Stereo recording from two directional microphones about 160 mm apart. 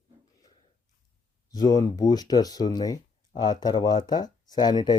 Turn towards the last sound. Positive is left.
turn(degrees=25)  # may be behind; listen again after turning